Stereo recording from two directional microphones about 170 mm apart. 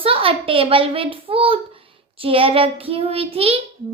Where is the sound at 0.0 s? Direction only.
35° right (ahead or behind).